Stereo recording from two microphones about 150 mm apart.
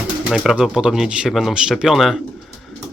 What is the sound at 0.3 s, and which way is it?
Speech, 5° right (ahead or behind).